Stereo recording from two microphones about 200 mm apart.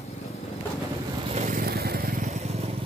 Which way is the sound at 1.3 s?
35° right (ahead or behind).